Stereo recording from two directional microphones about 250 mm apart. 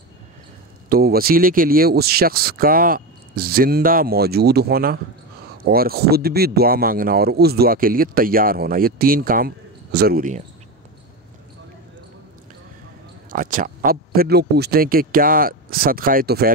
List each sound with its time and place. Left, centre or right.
0.8 s speech: right
13.3 s speech: right